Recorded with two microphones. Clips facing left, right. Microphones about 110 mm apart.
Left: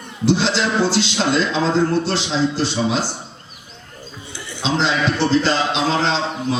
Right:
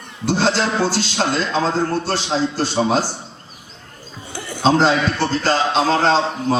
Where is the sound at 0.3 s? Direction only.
45° right (ahead or behind).